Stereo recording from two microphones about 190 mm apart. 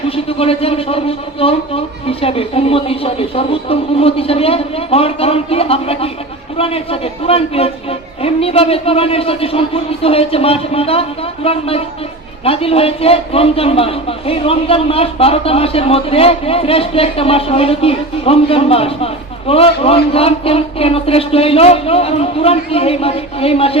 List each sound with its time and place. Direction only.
0.3 s a man's voice: 30° left (ahead or behind)